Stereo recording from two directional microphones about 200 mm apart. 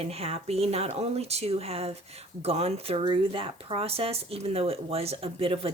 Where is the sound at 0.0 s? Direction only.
30° right (ahead or behind).